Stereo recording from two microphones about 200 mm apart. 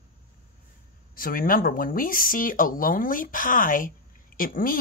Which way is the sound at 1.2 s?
45° left (ahead or behind).